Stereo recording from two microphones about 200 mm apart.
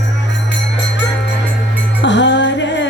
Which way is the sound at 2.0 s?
65° left (ahead or behind).